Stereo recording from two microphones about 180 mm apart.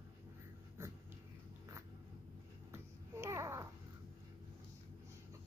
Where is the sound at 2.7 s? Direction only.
15° right (ahead or behind).